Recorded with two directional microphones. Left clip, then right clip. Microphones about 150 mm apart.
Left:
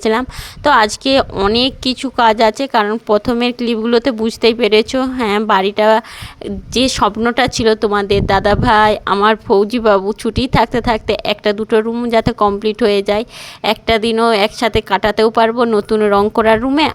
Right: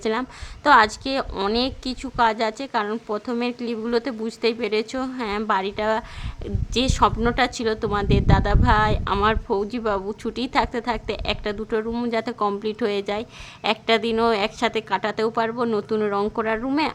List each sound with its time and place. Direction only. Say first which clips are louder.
0.0 s a woman's voice: left 9 dB; 45° left (ahead or behind)